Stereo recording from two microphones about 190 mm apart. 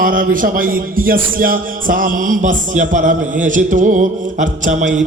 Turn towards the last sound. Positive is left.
turn(degrees=-40)  # may be behind; listen again after turning